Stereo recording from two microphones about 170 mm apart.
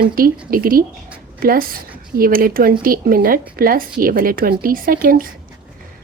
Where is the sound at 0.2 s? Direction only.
60° right (ahead or behind).